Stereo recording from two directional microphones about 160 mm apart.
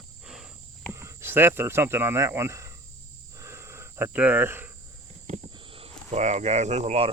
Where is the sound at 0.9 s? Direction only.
15° right (ahead or behind).